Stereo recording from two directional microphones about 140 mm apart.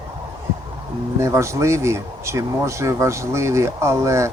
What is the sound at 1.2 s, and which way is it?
Speech, 20° right (ahead or behind).